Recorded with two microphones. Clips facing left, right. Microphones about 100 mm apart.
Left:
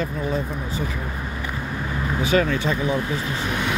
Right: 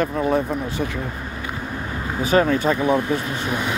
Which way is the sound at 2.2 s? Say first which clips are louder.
Right 4 dB; 40° right (ahead or behind).